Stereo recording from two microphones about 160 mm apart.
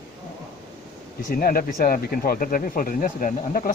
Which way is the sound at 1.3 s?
65° left (ahead or behind).